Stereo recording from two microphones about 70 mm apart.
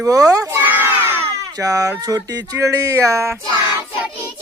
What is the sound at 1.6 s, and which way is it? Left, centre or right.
Speech, right.